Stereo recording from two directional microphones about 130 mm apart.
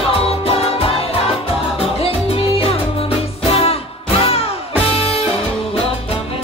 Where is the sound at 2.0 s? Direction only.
50° left (ahead or behind).